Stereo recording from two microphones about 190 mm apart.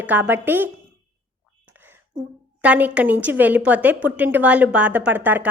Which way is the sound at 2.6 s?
5° right (ahead or behind).